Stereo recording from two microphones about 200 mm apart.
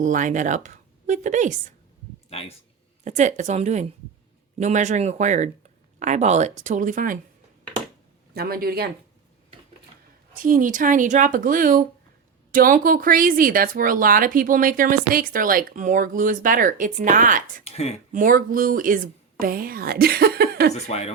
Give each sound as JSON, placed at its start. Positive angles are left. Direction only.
{"t": 0.0, "sound": "speech", "side_deg": -40}
{"t": 2.3, "sound": "speech", "side_deg": 30}
{"t": 3.0, "sound": "speech", "side_deg": -35}
{"t": 8.3, "sound": "speech", "side_deg": -50}
{"t": 10.3, "sound": "speech", "side_deg": -40}
{"t": 17.6, "sound": "speech", "side_deg": 30}
{"t": 18.1, "sound": "speech", "side_deg": -40}
{"t": 20.8, "sound": "speech", "side_deg": 30}